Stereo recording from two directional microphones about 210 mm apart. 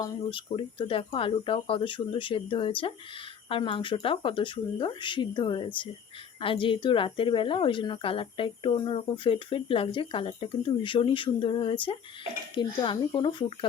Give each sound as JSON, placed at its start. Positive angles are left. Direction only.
{"t": 0.0, "sound": "a woman's voice", "side_deg": 25}